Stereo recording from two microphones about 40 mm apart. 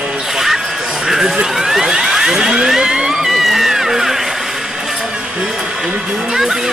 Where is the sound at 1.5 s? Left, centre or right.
Centre.